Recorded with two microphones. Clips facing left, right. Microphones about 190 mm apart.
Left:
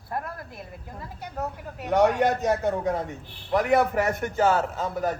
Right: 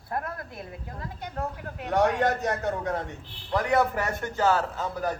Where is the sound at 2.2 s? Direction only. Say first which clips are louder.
Left 3 dB; 20° left (ahead or behind).